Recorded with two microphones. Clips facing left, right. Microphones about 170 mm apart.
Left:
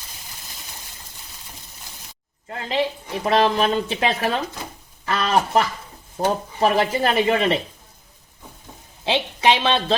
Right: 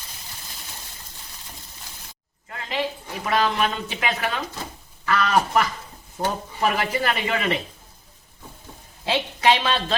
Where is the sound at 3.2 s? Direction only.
30° left (ahead or behind).